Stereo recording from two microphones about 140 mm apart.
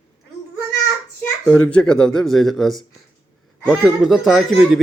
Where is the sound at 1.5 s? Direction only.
10° left (ahead or behind).